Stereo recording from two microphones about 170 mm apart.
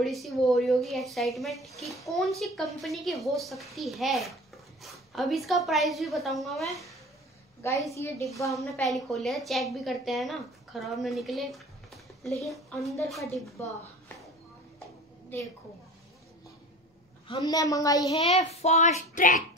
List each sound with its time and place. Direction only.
0.0 s a woman's voice: centre (ahead or behind)
7.9 s a woman's voice: 15° left (ahead or behind)
8.5 s a woman's voice: centre (ahead or behind)
13.6 s a woman's voice: 10° left (ahead or behind)
17.3 s a woman's voice: 20° left (ahead or behind)
18.1 s a child's voice: 40° left (ahead or behind)